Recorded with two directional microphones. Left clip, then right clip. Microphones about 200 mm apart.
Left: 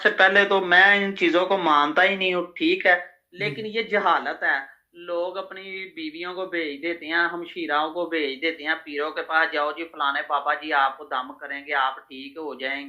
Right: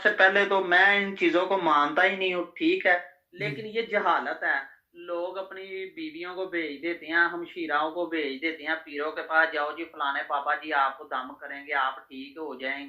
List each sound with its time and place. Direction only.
0.0 s speech: 45° left (ahead or behind)